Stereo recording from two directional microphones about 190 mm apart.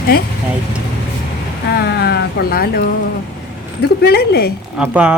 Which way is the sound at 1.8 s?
55° left (ahead or behind).